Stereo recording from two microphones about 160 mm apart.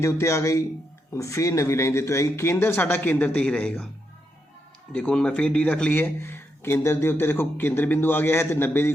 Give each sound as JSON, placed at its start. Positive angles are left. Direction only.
{"t": 0.0, "sound": "a man's voice", "side_deg": 20}
{"t": 4.9, "sound": "a man's voice", "side_deg": 5}